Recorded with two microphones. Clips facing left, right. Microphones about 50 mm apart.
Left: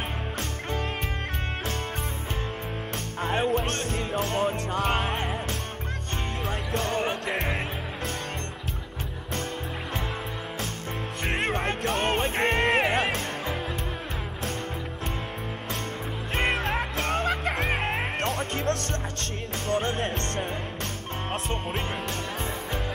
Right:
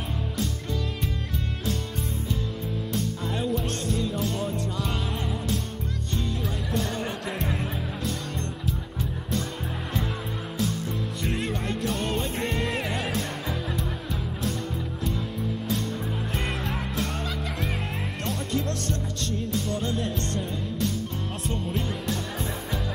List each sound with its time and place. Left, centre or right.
0.4 s music: left
2.9 s music: left
6.7 s music: left
11.2 s music: left
16.3 s music: left